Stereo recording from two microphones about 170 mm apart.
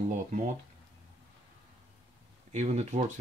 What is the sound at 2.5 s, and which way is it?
Speech, 40° right (ahead or behind).